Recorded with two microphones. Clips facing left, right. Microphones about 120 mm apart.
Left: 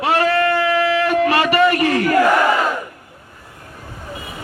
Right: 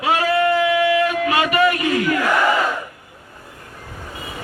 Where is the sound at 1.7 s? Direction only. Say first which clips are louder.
Left 3 dB; 55° left (ahead or behind).